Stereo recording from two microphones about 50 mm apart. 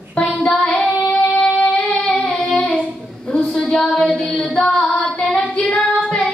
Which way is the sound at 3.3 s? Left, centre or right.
Centre.